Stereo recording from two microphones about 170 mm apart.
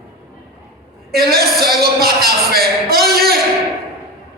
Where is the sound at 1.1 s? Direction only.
65° right (ahead or behind).